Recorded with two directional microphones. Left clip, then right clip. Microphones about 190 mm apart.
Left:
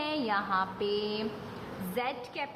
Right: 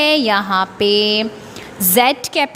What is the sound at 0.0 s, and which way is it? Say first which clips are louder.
A woman's voice: right 17 dB; 45° right (ahead or behind).